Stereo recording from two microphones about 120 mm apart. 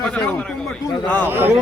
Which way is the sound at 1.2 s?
20° right (ahead or behind).